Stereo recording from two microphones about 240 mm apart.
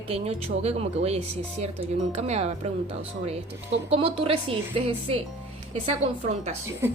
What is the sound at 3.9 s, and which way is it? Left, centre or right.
A woman's voice, right.